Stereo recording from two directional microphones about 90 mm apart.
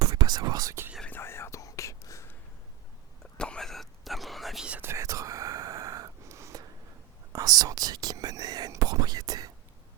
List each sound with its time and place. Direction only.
0.0 s whispering: 50° right (ahead or behind)
1.0 s whispering: 25° left (ahead or behind)
3.3 s whispering: 10° left (ahead or behind)
4.6 s whispering: 15° right (ahead or behind)
4.9 s whispering: 35° right (ahead or behind)